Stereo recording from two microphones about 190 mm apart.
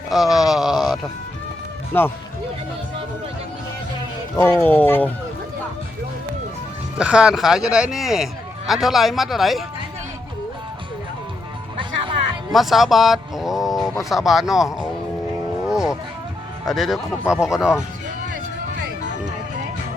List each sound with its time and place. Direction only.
0.1 s speech: centre (ahead or behind)
1.9 s speech: 10° left (ahead or behind)
4.4 s speech: 10° left (ahead or behind)
7.0 s speech: 5° right (ahead or behind)
11.8 s music: 25° right (ahead or behind)
12.5 s music: centre (ahead or behind)
14.0 s speech: centre (ahead or behind)
15.6 s music: 5° right (ahead or behind)
16.6 s speech: centre (ahead or behind)